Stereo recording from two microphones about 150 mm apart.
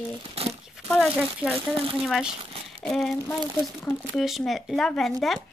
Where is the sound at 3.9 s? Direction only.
20° left (ahead or behind).